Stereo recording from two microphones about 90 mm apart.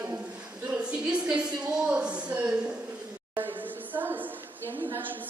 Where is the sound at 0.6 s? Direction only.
15° right (ahead or behind).